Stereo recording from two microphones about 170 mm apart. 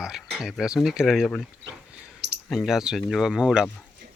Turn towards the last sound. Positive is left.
turn(degrees=0)  # may be behind; listen again after turning